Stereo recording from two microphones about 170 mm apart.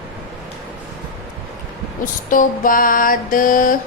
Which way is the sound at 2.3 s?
55° left (ahead or behind).